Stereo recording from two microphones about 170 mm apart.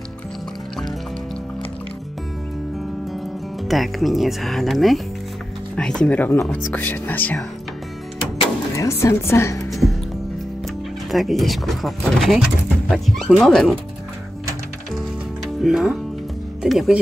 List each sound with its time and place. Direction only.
3.6 s speech: centre (ahead or behind)
8.7 s speech: 15° left (ahead or behind)
9.7 s music: centre (ahead or behind)
11.1 s speech: centre (ahead or behind)
15.0 s music: centre (ahead or behind)
16.6 s speech: centre (ahead or behind)